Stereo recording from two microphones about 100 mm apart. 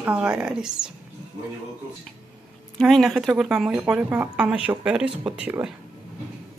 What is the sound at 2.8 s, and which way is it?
Speech, centre (ahead or behind).